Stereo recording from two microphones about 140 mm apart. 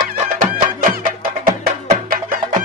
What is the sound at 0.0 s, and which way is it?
Music, 90° right.